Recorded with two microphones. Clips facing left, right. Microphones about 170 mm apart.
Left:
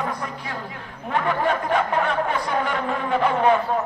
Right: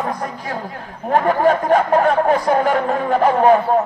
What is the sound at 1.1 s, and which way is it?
Speech, 45° right (ahead or behind).